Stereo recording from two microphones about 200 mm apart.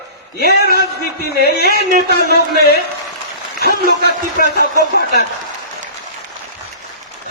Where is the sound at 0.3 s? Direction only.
50° left (ahead or behind).